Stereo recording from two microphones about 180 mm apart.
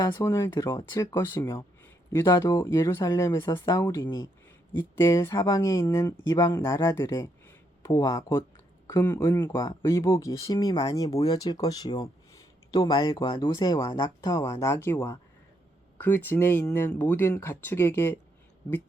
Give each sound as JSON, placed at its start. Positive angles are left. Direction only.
{"t": 0.0, "sound": "speech", "side_deg": 15}